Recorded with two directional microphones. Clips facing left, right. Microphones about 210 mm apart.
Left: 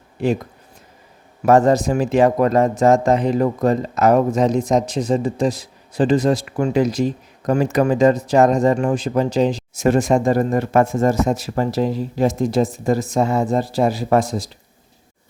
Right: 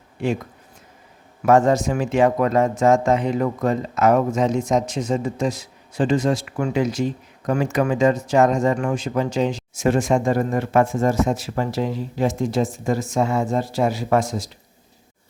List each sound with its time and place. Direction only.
0.2 s speech: 35° left (ahead or behind)
1.5 s speech: 35° left (ahead or behind)